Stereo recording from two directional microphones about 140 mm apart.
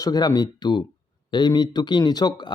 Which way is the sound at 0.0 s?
30° left (ahead or behind).